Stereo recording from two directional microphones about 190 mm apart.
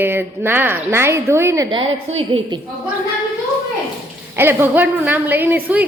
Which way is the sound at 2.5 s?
25° right (ahead or behind).